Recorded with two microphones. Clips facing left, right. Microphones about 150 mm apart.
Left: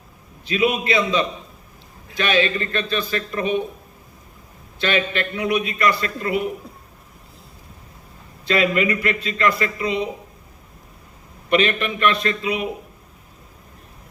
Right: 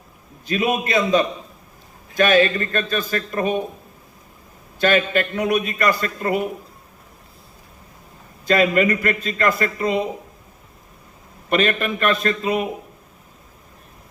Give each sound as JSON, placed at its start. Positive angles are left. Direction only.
{"t": 0.4, "sound": "speech", "side_deg": -45}
{"t": 4.8, "sound": "speech", "side_deg": -45}
{"t": 8.4, "sound": "speech", "side_deg": -45}
{"t": 11.4, "sound": "speech", "side_deg": -45}